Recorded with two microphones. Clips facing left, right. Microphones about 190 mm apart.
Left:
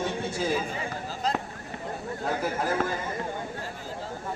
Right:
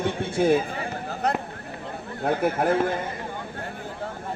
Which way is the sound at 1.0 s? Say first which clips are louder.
Right 4 dB; 60° right (ahead or behind).